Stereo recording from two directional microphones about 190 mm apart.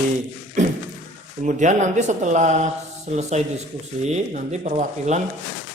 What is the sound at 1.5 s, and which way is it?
Speech, 40° right (ahead or behind).